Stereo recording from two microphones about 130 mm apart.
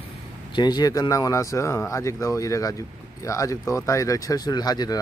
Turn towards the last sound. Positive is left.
turn(degrees=30)  # may be behind; listen again after turning